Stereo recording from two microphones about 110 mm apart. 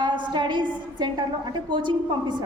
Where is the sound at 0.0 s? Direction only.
45° right (ahead or behind).